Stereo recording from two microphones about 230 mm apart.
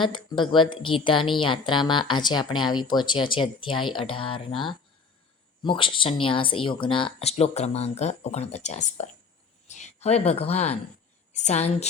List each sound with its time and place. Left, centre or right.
0.0 s speech: left